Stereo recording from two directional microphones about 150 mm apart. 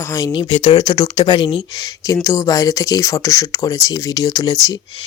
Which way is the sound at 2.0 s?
20° left (ahead or behind).